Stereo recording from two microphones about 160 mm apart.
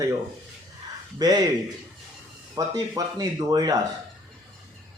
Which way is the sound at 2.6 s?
20° right (ahead or behind).